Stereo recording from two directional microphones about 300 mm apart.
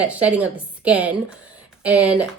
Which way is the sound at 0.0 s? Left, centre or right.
Centre.